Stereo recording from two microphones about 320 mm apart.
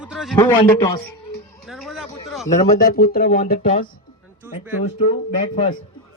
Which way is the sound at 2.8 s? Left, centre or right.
Left.